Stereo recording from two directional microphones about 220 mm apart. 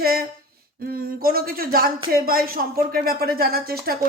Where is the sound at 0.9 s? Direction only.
40° right (ahead or behind).